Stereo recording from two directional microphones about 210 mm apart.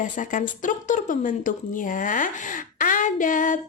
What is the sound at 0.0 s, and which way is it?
Speech, 40° left (ahead or behind).